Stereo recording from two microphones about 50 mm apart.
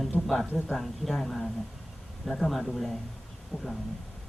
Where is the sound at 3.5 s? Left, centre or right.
Centre.